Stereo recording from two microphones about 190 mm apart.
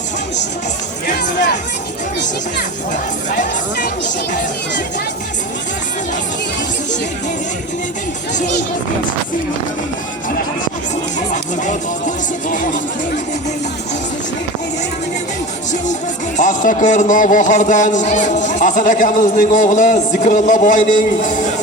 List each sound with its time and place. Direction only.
11.3 s a man's voice: 40° left (ahead or behind)
16.4 s a man's voice: 40° left (ahead or behind)